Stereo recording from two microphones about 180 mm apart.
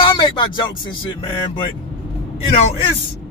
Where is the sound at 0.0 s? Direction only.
25° left (ahead or behind).